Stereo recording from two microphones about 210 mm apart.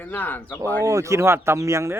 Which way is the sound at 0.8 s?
15° right (ahead or behind).